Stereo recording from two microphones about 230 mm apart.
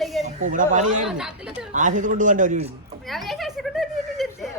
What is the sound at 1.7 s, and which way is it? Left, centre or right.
A man's voice, right.